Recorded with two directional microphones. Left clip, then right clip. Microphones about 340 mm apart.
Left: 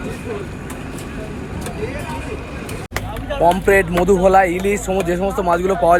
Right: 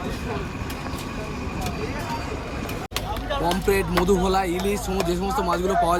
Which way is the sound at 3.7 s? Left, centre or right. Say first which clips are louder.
Left 7 dB; centre.